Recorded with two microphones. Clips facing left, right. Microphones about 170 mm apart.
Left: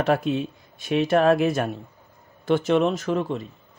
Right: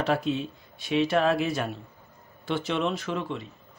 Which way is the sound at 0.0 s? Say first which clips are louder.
Left 4 dB; 50° left (ahead or behind).